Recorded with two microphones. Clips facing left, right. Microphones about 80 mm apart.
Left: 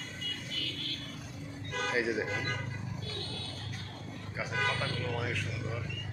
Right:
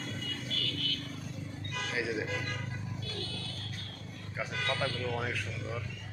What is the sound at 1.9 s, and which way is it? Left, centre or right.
Speech, left.